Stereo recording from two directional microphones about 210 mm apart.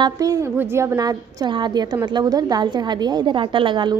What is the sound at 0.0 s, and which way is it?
A woman's voice, 15° right (ahead or behind).